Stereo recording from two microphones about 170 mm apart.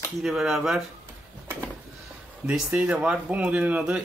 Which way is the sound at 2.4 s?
5° right (ahead or behind).